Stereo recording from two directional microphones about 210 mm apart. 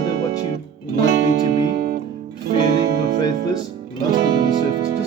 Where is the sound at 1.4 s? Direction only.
45° right (ahead or behind).